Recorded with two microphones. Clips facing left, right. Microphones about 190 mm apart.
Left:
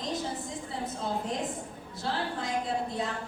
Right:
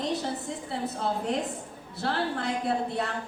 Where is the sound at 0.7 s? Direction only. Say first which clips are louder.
Right 4 dB; 65° right (ahead or behind).